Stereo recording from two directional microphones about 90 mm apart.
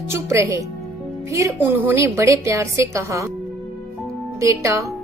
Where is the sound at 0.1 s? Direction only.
35° right (ahead or behind).